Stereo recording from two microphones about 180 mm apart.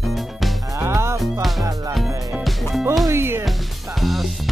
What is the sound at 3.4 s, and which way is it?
Music, centre (ahead or behind).